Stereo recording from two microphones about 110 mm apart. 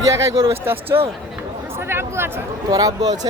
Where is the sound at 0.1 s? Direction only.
30° right (ahead or behind).